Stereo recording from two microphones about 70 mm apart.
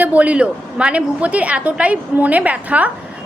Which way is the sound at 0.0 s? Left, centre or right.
Right.